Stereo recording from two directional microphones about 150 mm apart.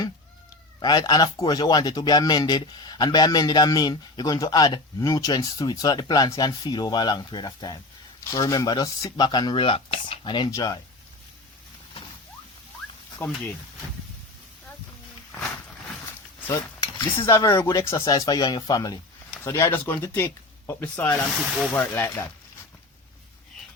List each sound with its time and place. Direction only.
0.8 s speech: 30° left (ahead or behind)
10.5 s speech: 25° left (ahead or behind)
13.2 s speech: 10° left (ahead or behind)
16.5 s speech: 20° left (ahead or behind)
21.3 s speech: centre (ahead or behind)
21.7 s speech: 15° left (ahead or behind)